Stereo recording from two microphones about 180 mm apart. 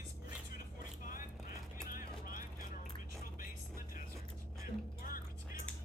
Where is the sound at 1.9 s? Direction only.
50° left (ahead or behind).